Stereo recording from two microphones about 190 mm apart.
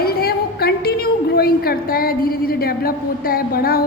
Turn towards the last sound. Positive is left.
turn(degrees=50)  # may be behind; listen again after turning